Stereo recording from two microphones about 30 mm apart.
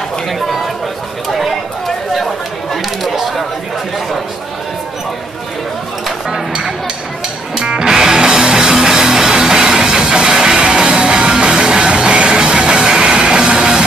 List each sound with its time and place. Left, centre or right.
1.3 s a sound: centre
2.7 s chatter: centre
7.5 s music: right